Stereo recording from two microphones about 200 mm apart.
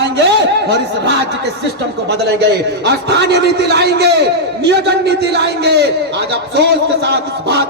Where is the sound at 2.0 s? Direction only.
55° right (ahead or behind).